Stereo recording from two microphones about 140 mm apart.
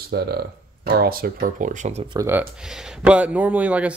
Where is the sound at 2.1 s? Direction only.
15° right (ahead or behind).